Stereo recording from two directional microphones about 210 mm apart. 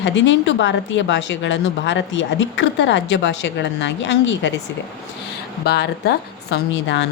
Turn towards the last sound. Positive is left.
turn(degrees=55)  # may be behind; listen again after turning